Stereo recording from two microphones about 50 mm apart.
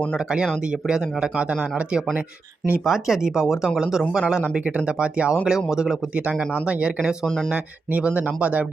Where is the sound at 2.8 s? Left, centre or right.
Centre.